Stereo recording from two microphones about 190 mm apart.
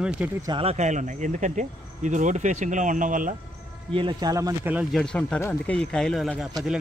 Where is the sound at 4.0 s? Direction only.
25° right (ahead or behind).